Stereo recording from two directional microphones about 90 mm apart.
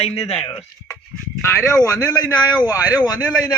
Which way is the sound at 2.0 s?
45° left (ahead or behind).